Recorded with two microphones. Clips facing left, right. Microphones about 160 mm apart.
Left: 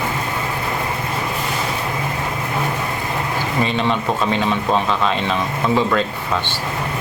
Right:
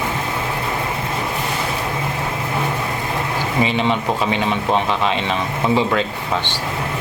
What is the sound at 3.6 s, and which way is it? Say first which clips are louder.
Speech: right 1 dB; 15° right (ahead or behind).